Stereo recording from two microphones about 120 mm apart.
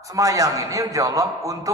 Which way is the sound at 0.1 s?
30° right (ahead or behind).